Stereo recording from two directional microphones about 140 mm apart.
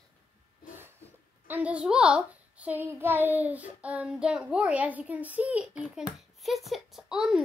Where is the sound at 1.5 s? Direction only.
10° right (ahead or behind).